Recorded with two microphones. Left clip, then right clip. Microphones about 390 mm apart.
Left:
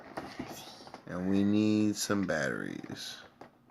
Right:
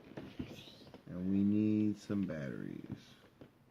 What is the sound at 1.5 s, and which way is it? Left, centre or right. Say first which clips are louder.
Speech: left 5 dB; left.